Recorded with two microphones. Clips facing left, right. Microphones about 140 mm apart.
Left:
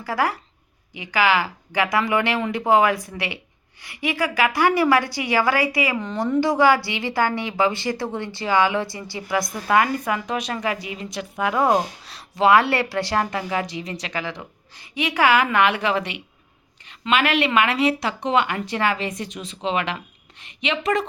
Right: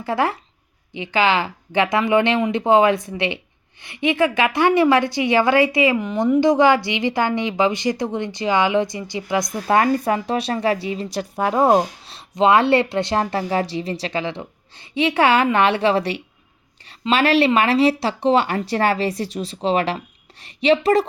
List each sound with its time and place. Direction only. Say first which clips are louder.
0.0 s a woman's voice: right 2 dB; 25° right (ahead or behind)
6.0 s a woman's voice: right 4 dB; 10° right (ahead or behind); by 21.0 s 35° right (ahead or behind)